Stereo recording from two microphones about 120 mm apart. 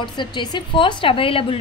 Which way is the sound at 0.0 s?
40° left (ahead or behind).